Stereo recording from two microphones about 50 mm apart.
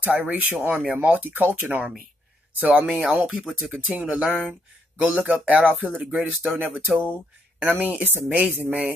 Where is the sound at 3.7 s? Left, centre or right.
Centre.